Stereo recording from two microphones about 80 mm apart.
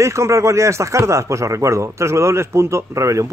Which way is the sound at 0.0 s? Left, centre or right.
Right.